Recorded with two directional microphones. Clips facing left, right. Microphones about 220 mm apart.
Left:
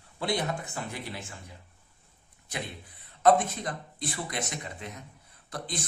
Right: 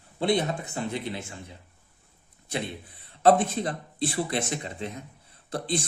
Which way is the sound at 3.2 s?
30° right (ahead or behind).